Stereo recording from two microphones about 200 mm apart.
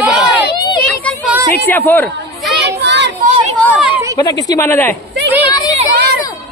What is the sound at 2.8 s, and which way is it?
Children playing, 60° right (ahead or behind).